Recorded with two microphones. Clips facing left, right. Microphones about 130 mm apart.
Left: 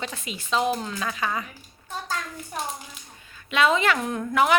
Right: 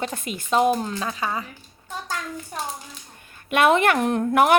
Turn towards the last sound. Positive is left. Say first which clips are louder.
# right 4 dB
turn(degrees=-55)  # may be behind; listen again after turning